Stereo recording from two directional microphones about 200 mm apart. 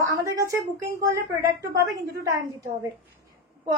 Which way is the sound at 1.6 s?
15° right (ahead or behind).